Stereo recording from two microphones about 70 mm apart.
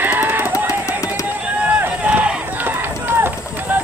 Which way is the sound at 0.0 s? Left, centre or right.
Right.